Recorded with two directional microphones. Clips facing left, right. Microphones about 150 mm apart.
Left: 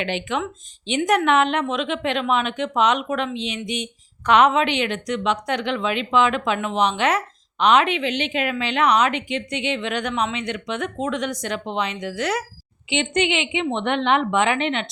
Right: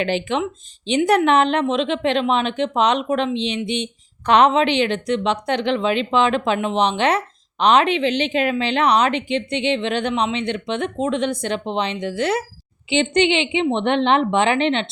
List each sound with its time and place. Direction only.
0.0 s a woman's voice: 35° right (ahead or behind)